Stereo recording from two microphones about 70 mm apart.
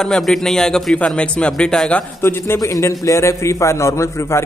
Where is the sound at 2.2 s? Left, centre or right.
Left.